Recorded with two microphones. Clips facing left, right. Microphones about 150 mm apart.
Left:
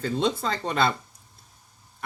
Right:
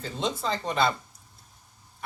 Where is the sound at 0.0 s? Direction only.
60° left (ahead or behind).